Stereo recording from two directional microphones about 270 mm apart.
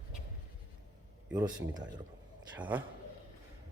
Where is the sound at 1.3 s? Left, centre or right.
Centre.